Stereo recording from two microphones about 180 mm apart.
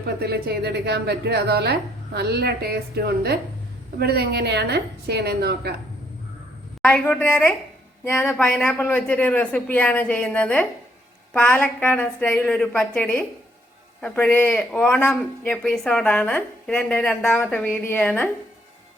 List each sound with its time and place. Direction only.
0.2 s a woman's voice: 65° right (ahead or behind)
6.8 s speech: 5° left (ahead or behind)